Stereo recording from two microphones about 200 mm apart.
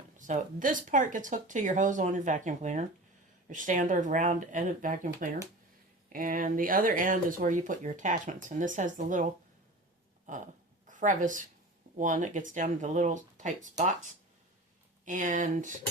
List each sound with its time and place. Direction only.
0.2 s speech: 40° right (ahead or behind)
10.3 s speech: 40° right (ahead or behind)